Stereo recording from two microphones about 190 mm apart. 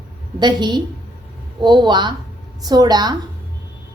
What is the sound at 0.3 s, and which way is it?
A woman's voice, 25° right (ahead or behind).